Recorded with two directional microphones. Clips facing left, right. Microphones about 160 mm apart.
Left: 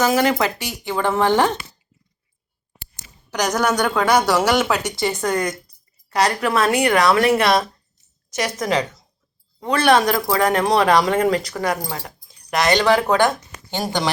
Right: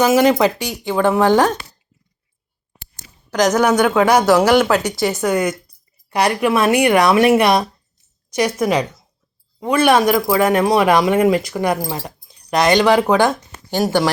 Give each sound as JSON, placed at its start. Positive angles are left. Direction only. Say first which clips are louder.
{"t": 0.0, "sound": "speech", "louder": "right 5 dB", "side_deg": -15}
{"t": 3.4, "sound": "speech", "louder": "right 5 dB", "side_deg": -5}
{"t": 11.7, "sound": "speech", "louder": "right 4 dB", "side_deg": -30}